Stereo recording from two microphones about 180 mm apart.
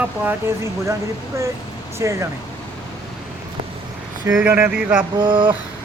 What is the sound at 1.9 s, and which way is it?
Speech, 15° right (ahead or behind).